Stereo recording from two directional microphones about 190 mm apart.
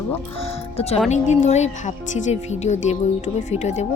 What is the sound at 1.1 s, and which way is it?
Speech, 35° left (ahead or behind).